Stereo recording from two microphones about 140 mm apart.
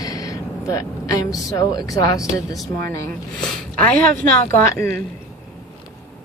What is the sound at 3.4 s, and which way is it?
A woman's voice, 10° left (ahead or behind).